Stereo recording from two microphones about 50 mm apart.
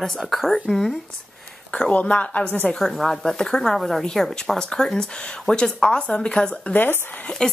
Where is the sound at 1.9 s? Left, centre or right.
Left.